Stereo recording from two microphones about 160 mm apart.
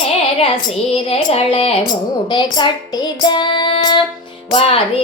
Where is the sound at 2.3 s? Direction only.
30° left (ahead or behind).